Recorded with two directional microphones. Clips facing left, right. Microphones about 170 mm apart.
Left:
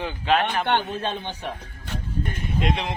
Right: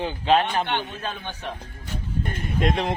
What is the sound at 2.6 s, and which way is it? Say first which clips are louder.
Speech: right 3 dB; 45° right (ahead or behind).